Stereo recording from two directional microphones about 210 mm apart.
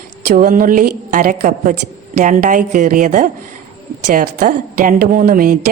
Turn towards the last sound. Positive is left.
turn(degrees=-45)  # may be behind; listen again after turning